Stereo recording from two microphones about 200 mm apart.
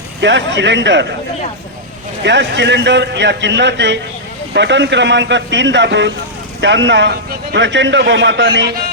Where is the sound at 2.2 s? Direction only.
60° right (ahead or behind).